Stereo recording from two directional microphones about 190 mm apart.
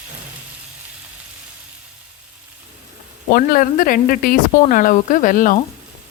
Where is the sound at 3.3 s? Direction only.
45° left (ahead or behind).